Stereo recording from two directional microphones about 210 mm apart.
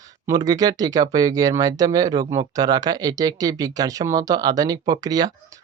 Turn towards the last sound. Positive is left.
turn(degrees=-20)  # may be behind; listen again after turning